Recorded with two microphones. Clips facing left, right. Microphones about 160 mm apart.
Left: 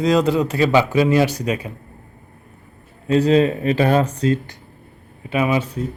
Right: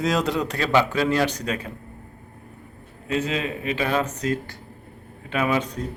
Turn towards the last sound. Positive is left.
turn(degrees=10)  # may be behind; listen again after turning